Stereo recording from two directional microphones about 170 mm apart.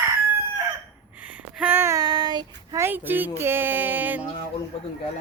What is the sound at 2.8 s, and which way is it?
Speech, 10° right (ahead or behind).